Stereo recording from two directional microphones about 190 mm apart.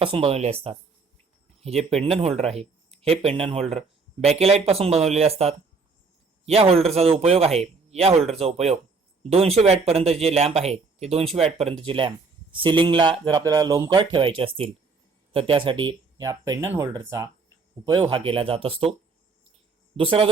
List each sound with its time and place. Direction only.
0.0 s speech: 30° right (ahead or behind)
1.6 s speech: 35° right (ahead or behind); by 14.0 s 15° right (ahead or behind)
14.0 s speech: 25° right (ahead or behind)
20.0 s speech: 30° right (ahead or behind)